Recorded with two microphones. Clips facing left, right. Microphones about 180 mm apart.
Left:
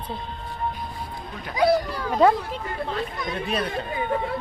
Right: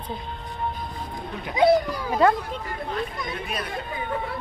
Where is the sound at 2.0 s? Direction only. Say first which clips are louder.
Left 2 dB; centre (ahead or behind).